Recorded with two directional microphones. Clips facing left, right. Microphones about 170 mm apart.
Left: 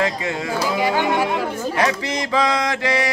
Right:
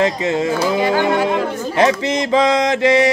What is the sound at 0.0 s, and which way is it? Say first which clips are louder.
Male singing: right 6 dB; 25° right (ahead or behind).